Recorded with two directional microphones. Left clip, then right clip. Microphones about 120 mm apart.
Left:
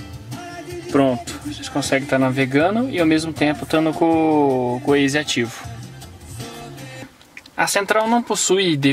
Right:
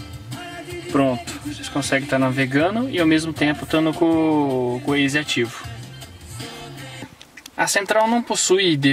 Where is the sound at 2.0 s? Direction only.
5° left (ahead or behind).